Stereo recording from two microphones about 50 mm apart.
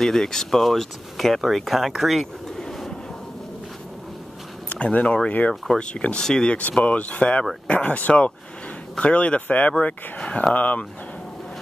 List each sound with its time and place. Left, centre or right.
0.0 s speech: centre
2.6 s train: centre
4.6 s speech: left
6.8 s speech: left